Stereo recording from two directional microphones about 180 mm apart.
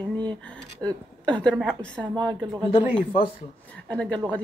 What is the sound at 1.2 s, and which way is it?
Speech, 5° left (ahead or behind).